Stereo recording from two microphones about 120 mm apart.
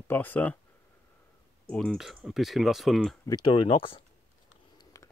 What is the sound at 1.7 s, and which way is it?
Speech, 10° left (ahead or behind).